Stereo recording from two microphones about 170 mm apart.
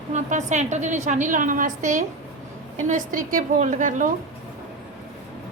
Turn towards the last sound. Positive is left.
turn(degrees=-50)  # may be behind; listen again after turning